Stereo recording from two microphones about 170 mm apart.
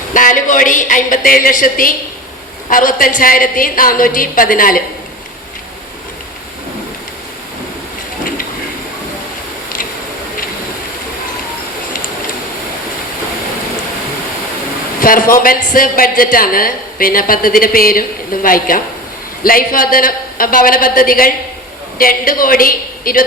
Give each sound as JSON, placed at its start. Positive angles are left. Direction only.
{"t": 0.1, "sound": "a woman's voice", "side_deg": 50}
{"t": 15.0, "sound": "speech", "side_deg": 55}